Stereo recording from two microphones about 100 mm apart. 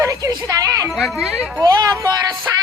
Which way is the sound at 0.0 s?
30° right (ahead or behind).